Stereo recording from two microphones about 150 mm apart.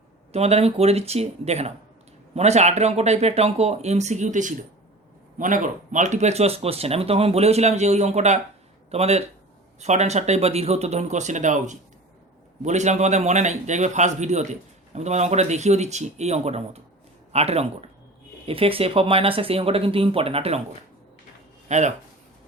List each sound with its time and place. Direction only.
0.3 s a man's voice: 45° right (ahead or behind)
21.7 s a man's voice: 50° right (ahead or behind)